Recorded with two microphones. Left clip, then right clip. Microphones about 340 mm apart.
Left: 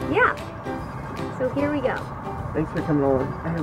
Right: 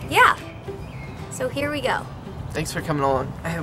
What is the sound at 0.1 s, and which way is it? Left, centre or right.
Music, centre.